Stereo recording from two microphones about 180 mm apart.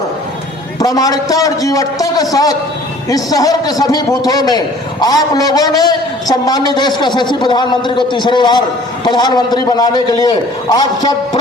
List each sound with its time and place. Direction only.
0.8 s a man's voice: 20° left (ahead or behind)